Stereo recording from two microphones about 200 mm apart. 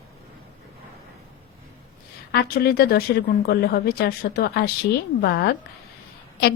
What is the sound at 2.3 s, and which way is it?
A woman's voice, 50° left (ahead or behind).